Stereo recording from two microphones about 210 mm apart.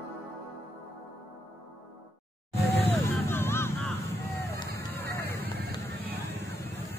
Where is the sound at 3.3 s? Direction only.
10° left (ahead or behind).